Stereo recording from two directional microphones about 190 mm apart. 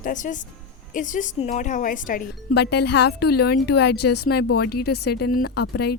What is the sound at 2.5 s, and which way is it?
Speech, 60° left (ahead or behind).